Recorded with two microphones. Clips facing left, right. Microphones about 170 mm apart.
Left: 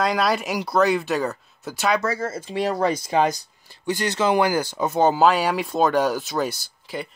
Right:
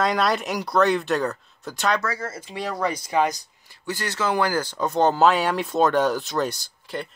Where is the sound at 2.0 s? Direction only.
25° left (ahead or behind).